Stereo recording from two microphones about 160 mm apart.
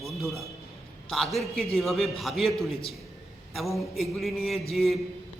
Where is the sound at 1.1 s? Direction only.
Centre (ahead or behind).